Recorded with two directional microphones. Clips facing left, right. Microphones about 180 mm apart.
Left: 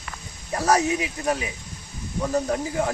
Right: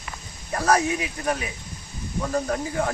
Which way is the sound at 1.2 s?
20° left (ahead or behind).